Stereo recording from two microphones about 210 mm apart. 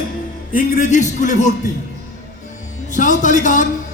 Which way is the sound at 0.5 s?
35° left (ahead or behind).